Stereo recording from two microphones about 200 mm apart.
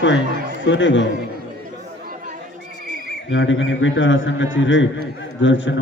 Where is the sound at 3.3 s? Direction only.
70° left (ahead or behind).